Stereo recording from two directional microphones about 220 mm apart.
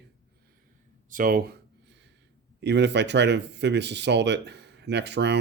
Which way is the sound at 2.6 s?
50° right (ahead or behind).